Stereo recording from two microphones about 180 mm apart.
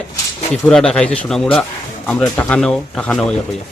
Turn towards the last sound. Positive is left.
turn(degrees=5)  # may be behind; listen again after turning